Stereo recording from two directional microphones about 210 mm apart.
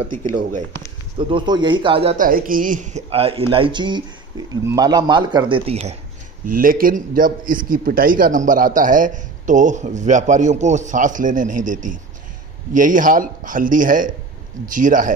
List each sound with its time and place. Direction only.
0.0 s a man's voice: 35° right (ahead or behind)
1.1 s speech: 20° right (ahead or behind)
2.1 s speech: 40° right (ahead or behind)
6.4 s a man's voice: 40° right (ahead or behind)